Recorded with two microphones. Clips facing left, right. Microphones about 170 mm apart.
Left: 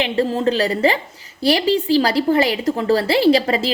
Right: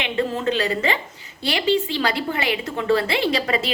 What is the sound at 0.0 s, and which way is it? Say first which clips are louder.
A woman's voice: left 5 dB; 35° left (ahead or behind).